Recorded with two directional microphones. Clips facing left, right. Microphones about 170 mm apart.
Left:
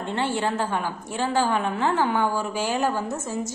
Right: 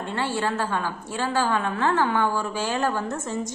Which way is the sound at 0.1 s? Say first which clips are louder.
Left 1 dB; 20° left (ahead or behind).